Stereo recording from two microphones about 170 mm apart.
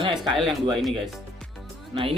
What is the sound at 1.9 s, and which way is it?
Speech, 35° right (ahead or behind).